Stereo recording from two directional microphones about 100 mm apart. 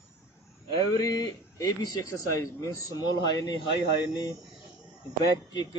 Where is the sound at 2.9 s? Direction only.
45° left (ahead or behind).